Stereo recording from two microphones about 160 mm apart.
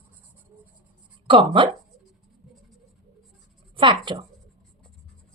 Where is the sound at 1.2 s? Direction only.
35° right (ahead or behind).